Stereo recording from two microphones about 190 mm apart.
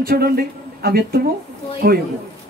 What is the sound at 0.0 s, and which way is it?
Speech, 50° right (ahead or behind).